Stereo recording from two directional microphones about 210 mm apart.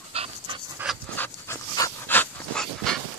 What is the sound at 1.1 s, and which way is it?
Dog, 10° left (ahead or behind).